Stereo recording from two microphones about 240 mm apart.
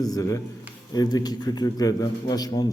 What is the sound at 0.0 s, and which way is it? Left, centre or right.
A man's voice, centre.